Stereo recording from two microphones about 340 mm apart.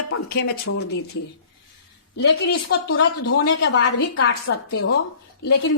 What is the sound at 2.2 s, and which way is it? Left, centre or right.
Speech, left.